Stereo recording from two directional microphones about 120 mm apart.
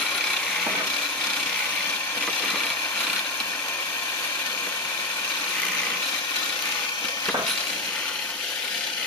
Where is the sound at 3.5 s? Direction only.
15° left (ahead or behind).